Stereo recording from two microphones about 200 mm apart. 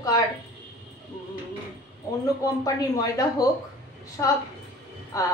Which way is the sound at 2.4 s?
15° left (ahead or behind).